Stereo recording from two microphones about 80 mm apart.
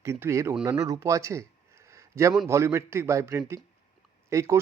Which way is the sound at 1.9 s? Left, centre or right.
Right.